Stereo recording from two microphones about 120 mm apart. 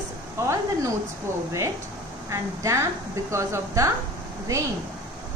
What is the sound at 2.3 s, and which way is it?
A woman's voice, 25° right (ahead or behind).